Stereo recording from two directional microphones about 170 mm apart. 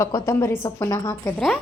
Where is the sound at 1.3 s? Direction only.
5° left (ahead or behind).